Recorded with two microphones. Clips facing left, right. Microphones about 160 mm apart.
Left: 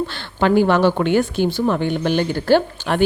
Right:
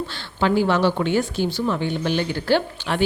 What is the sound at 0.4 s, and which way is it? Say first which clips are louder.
Speech: left 4 dB; 55° left (ahead or behind).